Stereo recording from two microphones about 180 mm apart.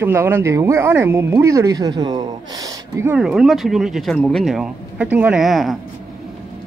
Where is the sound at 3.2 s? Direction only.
Centre (ahead or behind).